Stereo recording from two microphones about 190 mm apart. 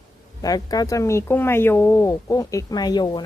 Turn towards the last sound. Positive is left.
turn(degrees=20)  # may be behind; listen again after turning